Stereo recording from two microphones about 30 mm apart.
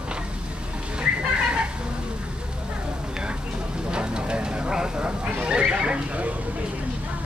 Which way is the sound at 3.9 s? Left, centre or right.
Right.